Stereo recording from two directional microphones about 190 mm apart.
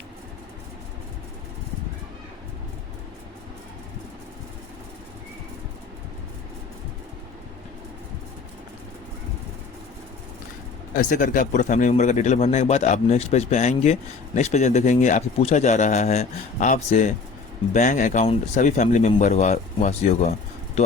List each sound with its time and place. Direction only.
10.9 s speech: 45° left (ahead or behind)